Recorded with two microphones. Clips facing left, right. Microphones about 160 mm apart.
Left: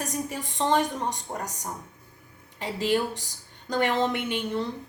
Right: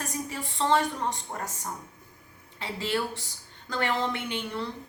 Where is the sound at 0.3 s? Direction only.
15° left (ahead or behind).